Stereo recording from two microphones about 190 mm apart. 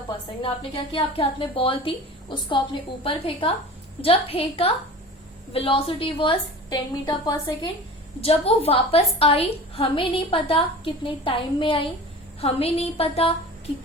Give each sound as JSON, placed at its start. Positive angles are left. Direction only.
{"t": 0.4, "sound": "a woman's voice", "side_deg": 25}
{"t": 3.0, "sound": "a woman's voice", "side_deg": 30}
{"t": 8.2, "sound": "a woman's voice", "side_deg": 30}